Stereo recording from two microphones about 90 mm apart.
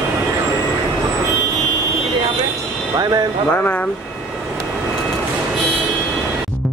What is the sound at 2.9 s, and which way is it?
Music, 45° right (ahead or behind).